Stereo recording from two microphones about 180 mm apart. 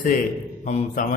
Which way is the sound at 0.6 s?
40° left (ahead or behind).